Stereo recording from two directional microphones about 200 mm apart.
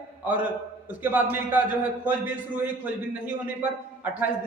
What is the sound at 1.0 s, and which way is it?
Speech, 10° right (ahead or behind).